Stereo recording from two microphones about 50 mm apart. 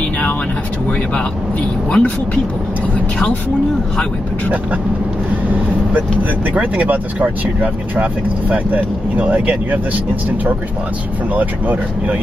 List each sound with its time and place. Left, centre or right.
1.9 s speech: left
6.5 s speech: right
11.3 s speech: right